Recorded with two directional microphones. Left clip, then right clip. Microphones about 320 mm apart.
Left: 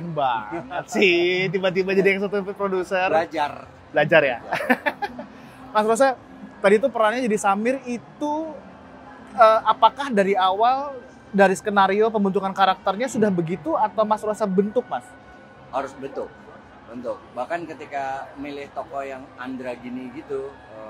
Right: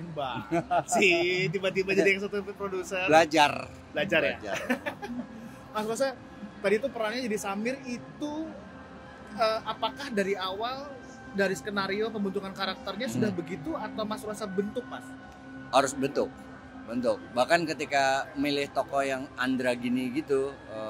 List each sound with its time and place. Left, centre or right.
0.1 s a man's voice: left
3.1 s speech: right
3.9 s a woman's voice: left
6.6 s speech: left
15.7 s a man's voice: right